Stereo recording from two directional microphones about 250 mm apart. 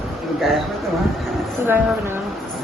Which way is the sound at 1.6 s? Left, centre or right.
Centre.